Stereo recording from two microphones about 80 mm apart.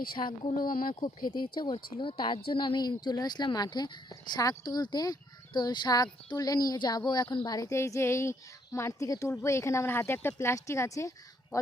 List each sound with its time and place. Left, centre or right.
0.1 s speech: left
0.9 s speech: left
4.1 s speech: left
7.7 s speech: left